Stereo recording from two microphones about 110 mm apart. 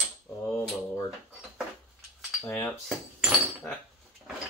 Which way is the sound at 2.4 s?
15° left (ahead or behind).